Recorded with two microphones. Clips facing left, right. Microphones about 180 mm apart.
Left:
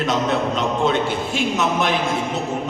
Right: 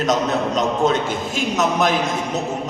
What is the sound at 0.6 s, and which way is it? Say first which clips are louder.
A man's voice: right 1 dB; 40° right (ahead or behind).